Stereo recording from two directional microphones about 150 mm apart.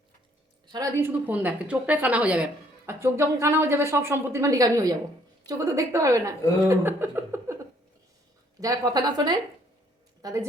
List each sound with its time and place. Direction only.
0.7 s a woman's voice: 20° right (ahead or behind)
8.6 s a woman's voice: 25° right (ahead or behind)